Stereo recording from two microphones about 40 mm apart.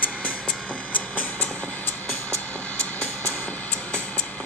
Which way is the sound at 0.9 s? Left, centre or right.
Left.